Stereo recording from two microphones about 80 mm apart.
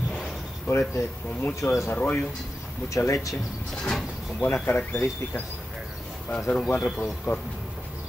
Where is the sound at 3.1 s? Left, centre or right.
Left.